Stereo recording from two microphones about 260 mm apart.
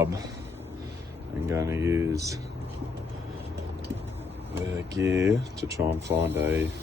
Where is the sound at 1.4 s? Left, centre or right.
Centre.